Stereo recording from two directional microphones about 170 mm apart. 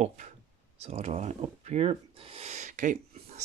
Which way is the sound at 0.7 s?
40° right (ahead or behind).